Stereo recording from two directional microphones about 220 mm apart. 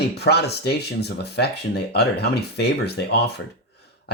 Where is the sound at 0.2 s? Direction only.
45° left (ahead or behind).